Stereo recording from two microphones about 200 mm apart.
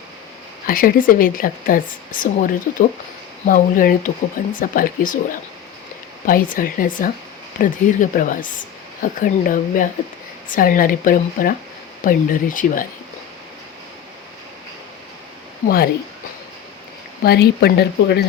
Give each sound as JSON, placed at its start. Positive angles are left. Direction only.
{"t": 0.7, "sound": "a woman's voice", "side_deg": 45}
{"t": 15.6, "sound": "a woman's voice", "side_deg": 45}
{"t": 17.2, "sound": "a woman's voice", "side_deg": 55}